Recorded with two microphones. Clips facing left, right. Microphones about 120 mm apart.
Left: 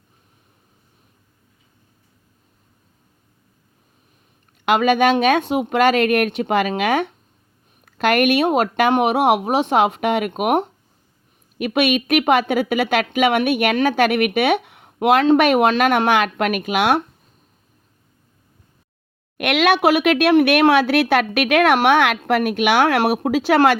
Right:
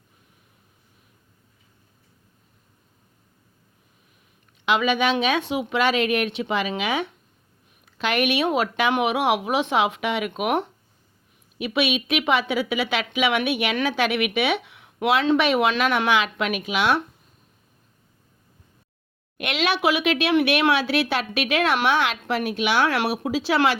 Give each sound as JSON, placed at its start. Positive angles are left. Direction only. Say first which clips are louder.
{"t": 4.6, "sound": "a woman's voice", "louder": "left 6 dB", "side_deg": 45}
{"t": 19.4, "sound": "a woman's voice", "louder": "left 7 dB", "side_deg": 60}